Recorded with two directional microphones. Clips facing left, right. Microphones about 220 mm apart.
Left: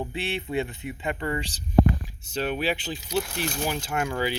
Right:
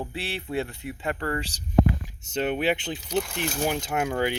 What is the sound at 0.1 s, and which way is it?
Speech, centre (ahead or behind).